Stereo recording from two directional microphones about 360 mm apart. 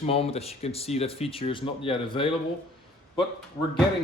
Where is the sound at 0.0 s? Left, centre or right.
Centre.